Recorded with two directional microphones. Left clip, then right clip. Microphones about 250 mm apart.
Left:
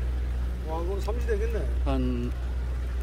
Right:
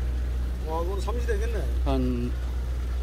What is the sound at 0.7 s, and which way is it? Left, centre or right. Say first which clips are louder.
Speech: right 2 dB; right.